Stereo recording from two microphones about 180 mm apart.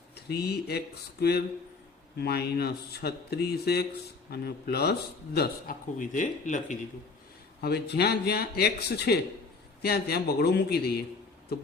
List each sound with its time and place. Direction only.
0.3 s a man's voice: 65° left (ahead or behind)
2.1 s a man's voice: 65° left (ahead or behind); by 6.7 s 45° left (ahead or behind)
7.6 s a man's voice: 65° left (ahead or behind)